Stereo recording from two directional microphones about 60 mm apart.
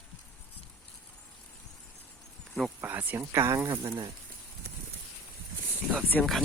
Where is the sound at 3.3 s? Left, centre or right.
Right.